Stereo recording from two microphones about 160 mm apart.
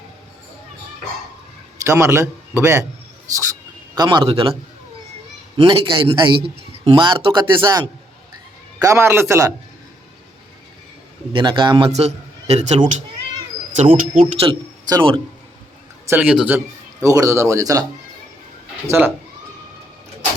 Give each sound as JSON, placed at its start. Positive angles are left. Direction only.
{"t": 1.8, "sound": "a man's voice", "side_deg": -15}
{"t": 3.3, "sound": "a sound", "side_deg": -25}
{"t": 4.3, "sound": "a man's voice", "side_deg": -35}
{"t": 5.5, "sound": "a man's voice", "side_deg": -30}
{"t": 11.3, "sound": "a man's voice", "side_deg": -30}
{"t": 11.9, "sound": "a man's voice", "side_deg": -40}
{"t": 16.0, "sound": "a man's voice", "side_deg": -10}
{"t": 17.0, "sound": "a man's voice", "side_deg": -20}
{"t": 18.9, "sound": "a man's voice", "side_deg": -15}